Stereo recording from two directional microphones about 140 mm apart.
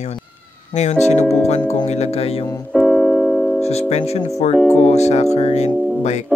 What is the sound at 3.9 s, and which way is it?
Speech, 50° left (ahead or behind).